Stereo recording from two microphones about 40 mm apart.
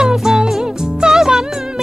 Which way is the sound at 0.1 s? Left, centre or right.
Centre.